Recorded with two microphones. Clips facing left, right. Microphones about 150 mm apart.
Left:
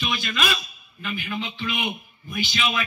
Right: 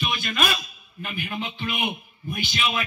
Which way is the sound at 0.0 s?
50° right (ahead or behind).